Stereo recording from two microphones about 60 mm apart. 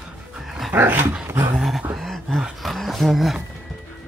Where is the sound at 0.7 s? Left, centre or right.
Right.